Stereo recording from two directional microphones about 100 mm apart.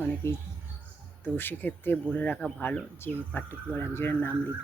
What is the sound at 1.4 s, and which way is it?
Speech, 20° left (ahead or behind).